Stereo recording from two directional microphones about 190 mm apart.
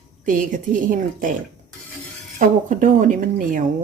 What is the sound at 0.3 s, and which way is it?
A woman's voice, 45° right (ahead or behind).